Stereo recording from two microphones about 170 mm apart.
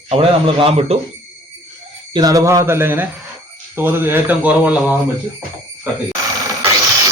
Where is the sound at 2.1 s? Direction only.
20° right (ahead or behind).